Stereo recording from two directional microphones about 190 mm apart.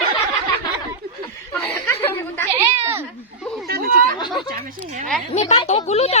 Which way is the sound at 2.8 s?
10° right (ahead or behind).